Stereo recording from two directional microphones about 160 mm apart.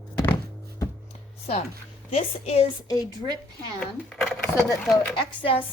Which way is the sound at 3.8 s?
5° left (ahead or behind).